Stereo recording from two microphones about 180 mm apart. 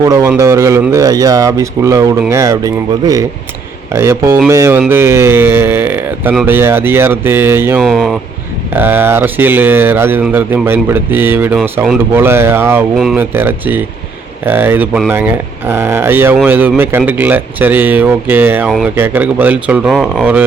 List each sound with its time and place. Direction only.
0.0 s a man's voice: 20° right (ahead or behind)
7.8 s speech: centre (ahead or behind)
8.7 s a man's voice: 10° right (ahead or behind)